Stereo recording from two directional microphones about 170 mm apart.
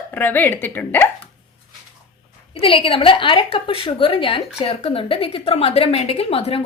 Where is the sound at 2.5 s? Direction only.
30° left (ahead or behind).